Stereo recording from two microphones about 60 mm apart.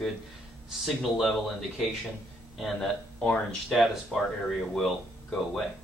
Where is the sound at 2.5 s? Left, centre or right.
Centre.